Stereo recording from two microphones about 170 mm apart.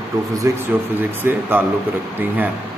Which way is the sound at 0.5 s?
15° right (ahead or behind).